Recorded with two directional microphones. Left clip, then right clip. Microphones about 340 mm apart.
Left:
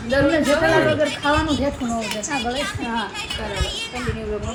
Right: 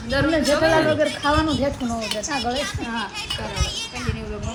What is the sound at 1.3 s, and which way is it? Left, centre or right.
Speech, right.